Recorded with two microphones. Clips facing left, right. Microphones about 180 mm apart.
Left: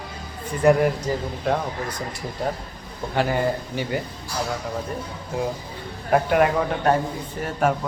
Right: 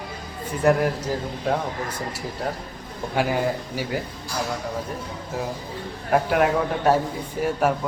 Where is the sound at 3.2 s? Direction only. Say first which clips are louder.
Left 1 dB; 5° right (ahead or behind).